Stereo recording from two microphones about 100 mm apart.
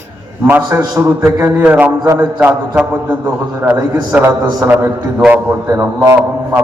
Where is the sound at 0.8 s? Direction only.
30° right (ahead or behind).